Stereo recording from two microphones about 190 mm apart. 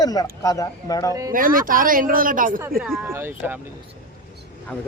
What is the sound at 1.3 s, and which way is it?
Speech, 45° right (ahead or behind).